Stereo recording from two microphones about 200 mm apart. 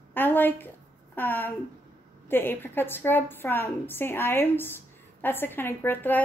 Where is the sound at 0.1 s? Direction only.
10° left (ahead or behind).